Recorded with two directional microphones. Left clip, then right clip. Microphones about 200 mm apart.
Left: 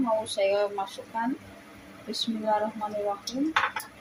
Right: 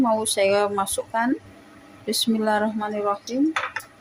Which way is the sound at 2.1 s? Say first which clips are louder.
Right 5 dB; 45° right (ahead or behind).